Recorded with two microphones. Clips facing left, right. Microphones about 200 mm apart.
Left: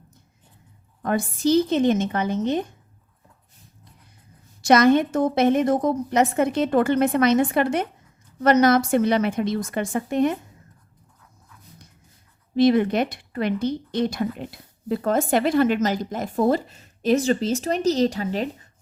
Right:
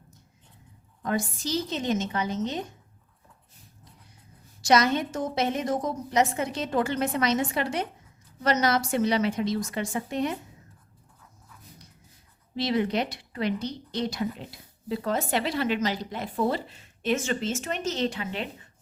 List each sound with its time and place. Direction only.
1.0 s a woman's voice: 55° left (ahead or behind)
4.6 s a woman's voice: 55° left (ahead or behind)
12.5 s speech: 50° left (ahead or behind)